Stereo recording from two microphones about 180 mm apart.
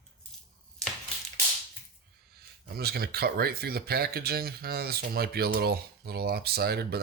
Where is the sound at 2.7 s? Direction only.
60° right (ahead or behind).